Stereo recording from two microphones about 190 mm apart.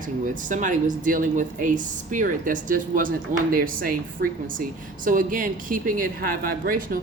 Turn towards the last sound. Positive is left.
turn(degrees=-50)  # may be behind; listen again after turning